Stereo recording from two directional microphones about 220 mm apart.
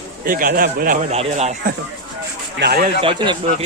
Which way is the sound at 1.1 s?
30° right (ahead or behind).